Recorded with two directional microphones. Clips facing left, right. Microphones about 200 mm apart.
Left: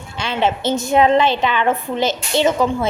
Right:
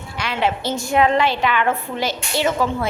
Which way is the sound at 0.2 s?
25° left (ahead or behind).